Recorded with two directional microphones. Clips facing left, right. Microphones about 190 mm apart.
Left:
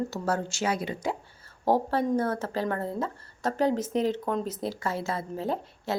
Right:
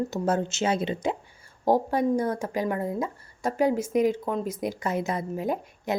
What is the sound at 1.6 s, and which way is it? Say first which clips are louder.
Speech: right 2 dB; 15° right (ahead or behind).